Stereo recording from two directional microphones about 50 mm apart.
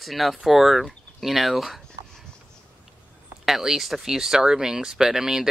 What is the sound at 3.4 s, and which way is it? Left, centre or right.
Speech, centre.